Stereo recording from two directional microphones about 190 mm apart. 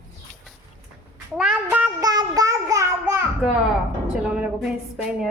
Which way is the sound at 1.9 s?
20° right (ahead or behind).